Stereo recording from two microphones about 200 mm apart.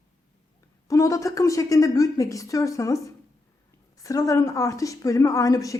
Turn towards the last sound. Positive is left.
turn(degrees=15)  # may be behind; listen again after turning